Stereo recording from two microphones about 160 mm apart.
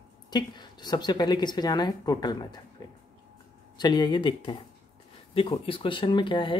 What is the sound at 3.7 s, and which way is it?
Speech, 25° left (ahead or behind).